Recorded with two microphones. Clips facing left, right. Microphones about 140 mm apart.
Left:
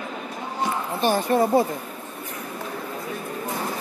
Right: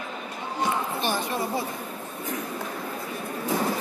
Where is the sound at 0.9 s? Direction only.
45° left (ahead or behind).